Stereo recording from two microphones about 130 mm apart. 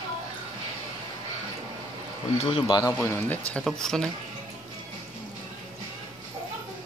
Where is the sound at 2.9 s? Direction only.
20° left (ahead or behind).